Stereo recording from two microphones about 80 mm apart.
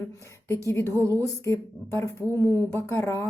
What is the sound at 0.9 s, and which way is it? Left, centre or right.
Speech, right.